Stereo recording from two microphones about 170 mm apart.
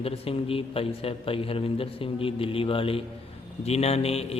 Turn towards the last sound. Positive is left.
turn(degrees=35)  # may be behind; listen again after turning